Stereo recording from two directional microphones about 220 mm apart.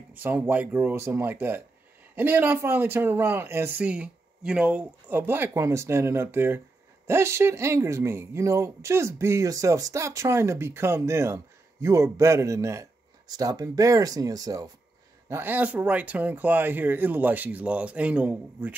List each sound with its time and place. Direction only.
0.2 s speech: 10° right (ahead or behind)